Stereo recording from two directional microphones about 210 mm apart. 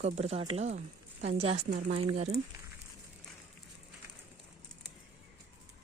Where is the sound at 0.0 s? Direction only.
30° right (ahead or behind).